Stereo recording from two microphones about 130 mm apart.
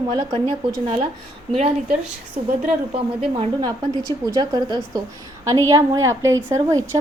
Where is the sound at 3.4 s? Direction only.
35° right (ahead or behind).